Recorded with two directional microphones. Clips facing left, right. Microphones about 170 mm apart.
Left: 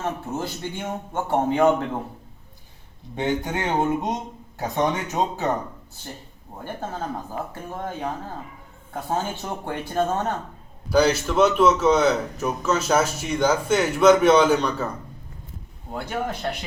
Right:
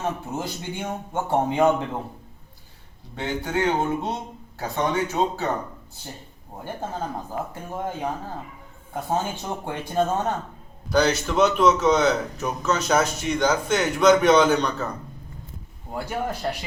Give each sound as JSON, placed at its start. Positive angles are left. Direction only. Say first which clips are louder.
{"t": 0.0, "sound": "a man's voice", "louder": "even", "side_deg": -15}
{"t": 3.2, "sound": "speech", "louder": "left 1 dB", "side_deg": 20}
{"t": 7.5, "sound": "a man's voice", "louder": "right 1 dB", "side_deg": -15}
{"t": 10.9, "sound": "a man's voice", "louder": "left 2 dB", "side_deg": 5}
{"t": 15.9, "sound": "a man's voice", "louder": "even", "side_deg": -5}